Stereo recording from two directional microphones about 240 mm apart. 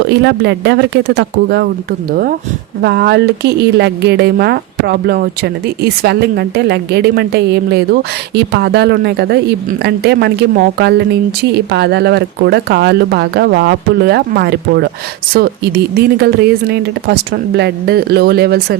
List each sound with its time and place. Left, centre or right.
0.1 s a woman's voice: right